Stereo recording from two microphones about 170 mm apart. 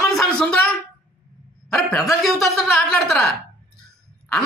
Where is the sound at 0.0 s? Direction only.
Centre (ahead or behind).